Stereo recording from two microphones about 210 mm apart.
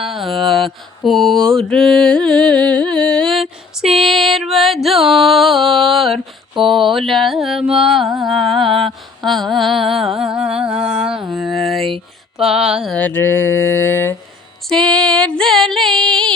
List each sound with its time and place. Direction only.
0.0 s mantra: centre (ahead or behind)
14.7 s female singing: 5° left (ahead or behind)